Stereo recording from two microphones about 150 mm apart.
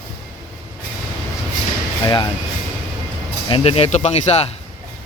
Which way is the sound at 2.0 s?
30° left (ahead or behind).